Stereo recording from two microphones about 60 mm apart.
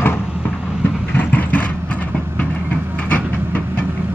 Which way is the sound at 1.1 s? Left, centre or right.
Left.